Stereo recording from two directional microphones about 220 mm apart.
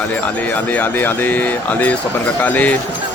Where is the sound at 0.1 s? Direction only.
5° left (ahead or behind).